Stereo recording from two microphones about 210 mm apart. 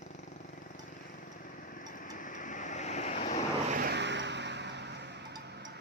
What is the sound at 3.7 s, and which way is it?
Vehicle, 50° right (ahead or behind).